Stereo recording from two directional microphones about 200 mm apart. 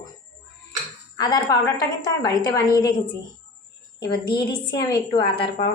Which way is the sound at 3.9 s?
20° left (ahead or behind).